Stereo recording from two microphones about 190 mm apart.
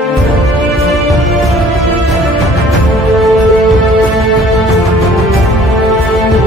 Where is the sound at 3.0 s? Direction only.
Centre (ahead or behind).